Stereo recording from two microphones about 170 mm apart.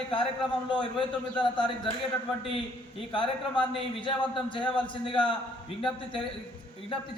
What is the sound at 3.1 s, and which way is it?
Speech, 30° left (ahead or behind).